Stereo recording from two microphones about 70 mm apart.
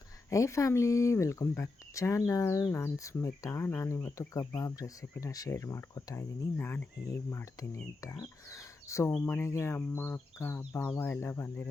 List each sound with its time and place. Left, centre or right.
0.3 s speech: left
2.6 s speech: left
3.0 s speech: left
4.4 s speech: left
6.6 s speech: left